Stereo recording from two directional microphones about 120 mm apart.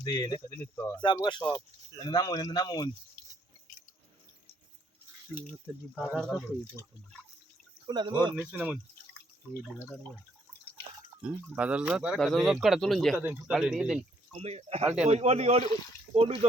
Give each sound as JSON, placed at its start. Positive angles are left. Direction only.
{"t": 0.0, "sound": "speech", "side_deg": 30}
{"t": 0.6, "sound": "speech", "side_deg": 20}
{"t": 1.0, "sound": "speech", "side_deg": 40}
{"t": 5.9, "sound": "speech", "side_deg": 0}
{"t": 7.9, "sound": "speech", "side_deg": -40}
{"t": 8.4, "sound": "speech", "side_deg": -10}
{"t": 11.5, "sound": "speech", "side_deg": -10}
{"t": 13.1, "sound": "speech", "side_deg": -15}
{"t": 13.5, "sound": "speech", "side_deg": -5}
{"t": 14.3, "sound": "a man's voice", "side_deg": -60}